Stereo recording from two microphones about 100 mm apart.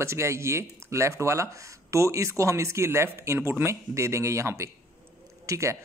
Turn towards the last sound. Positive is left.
turn(degrees=-30)  # may be behind; listen again after turning